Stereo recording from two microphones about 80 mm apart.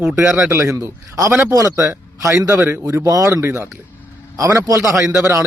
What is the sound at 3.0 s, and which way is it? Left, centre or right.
Speech, right.